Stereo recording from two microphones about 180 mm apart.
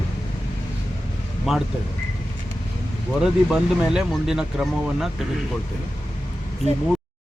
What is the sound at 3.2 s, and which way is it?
Speech, centre (ahead or behind).